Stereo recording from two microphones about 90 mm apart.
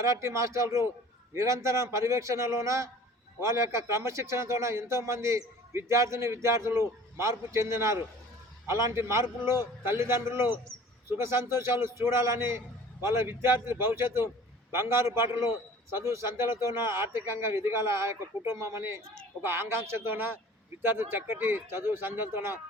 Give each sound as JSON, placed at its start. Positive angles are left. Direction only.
{"t": 0.0, "sound": "a man's voice", "side_deg": -30}